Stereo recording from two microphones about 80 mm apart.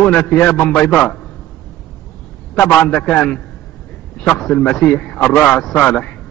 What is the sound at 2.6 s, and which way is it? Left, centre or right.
Speech, left.